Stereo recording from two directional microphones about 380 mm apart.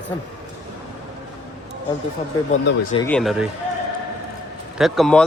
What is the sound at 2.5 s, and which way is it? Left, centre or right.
Speech, centre.